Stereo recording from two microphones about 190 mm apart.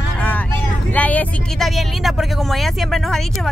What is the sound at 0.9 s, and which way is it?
Speech, 10° left (ahead or behind).